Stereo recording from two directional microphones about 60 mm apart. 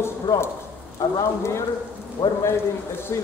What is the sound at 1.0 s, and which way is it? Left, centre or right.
Speech, left.